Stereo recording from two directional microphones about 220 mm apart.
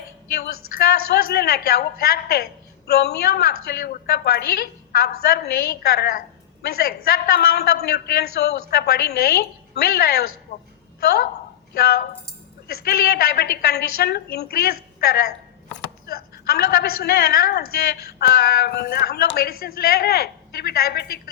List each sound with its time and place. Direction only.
0.8 s a woman's voice: 45° left (ahead or behind)
10.5 s a woman's voice: 30° left (ahead or behind)
11.0 s a woman's voice: 45° left (ahead or behind)